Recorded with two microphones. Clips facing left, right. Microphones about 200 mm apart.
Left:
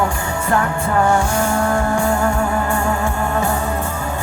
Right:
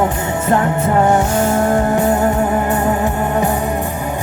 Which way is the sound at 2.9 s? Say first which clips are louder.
Right 3 dB; 30° right (ahead or behind).